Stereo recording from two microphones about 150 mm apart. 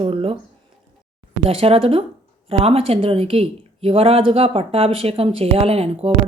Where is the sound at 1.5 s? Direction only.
40° right (ahead or behind).